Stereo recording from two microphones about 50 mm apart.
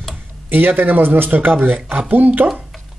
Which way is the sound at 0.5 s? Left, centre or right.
Right.